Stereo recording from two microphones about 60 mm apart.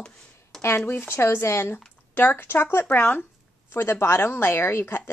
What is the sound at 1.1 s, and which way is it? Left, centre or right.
Speech, left.